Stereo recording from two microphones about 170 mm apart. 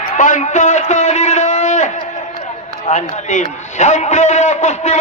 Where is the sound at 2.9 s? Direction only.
45° left (ahead or behind).